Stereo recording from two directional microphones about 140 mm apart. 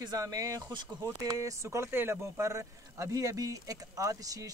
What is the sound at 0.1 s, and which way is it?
Speech, 25° right (ahead or behind).